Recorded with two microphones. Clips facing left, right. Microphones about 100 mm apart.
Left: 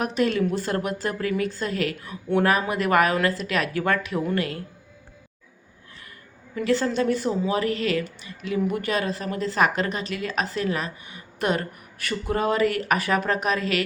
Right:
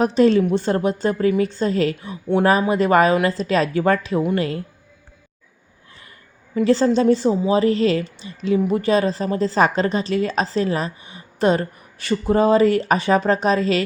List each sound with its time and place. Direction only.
0.0 s a woman's voice: 30° right (ahead or behind)
6.6 s a woman's voice: 25° right (ahead or behind)